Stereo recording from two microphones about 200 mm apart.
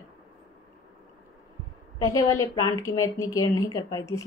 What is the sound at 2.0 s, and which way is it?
Speech, 15° left (ahead or behind).